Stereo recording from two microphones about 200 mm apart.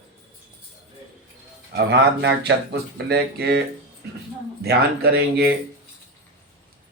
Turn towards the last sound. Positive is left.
turn(degrees=-50)  # may be behind; listen again after turning